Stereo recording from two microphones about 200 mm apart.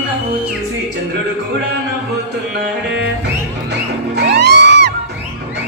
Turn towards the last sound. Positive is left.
turn(degrees=-60)  # may be behind; listen again after turning